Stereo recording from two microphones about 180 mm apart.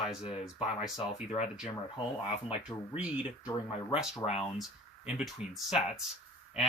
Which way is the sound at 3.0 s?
5° right (ahead or behind).